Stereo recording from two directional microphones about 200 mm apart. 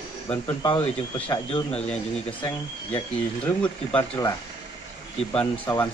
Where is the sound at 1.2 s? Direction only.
30° left (ahead or behind).